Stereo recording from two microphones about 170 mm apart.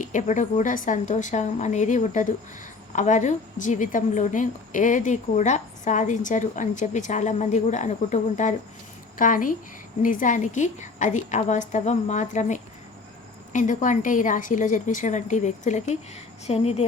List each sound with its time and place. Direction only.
0.0 s a woman's voice: 45° left (ahead or behind)